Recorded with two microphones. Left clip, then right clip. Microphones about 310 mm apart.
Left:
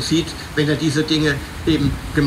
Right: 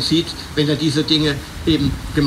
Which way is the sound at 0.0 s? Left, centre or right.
Right.